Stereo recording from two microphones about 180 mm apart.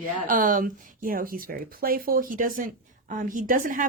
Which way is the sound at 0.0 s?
50° right (ahead or behind).